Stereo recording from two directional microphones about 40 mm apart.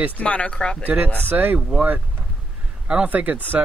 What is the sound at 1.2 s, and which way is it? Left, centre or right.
Speech, right.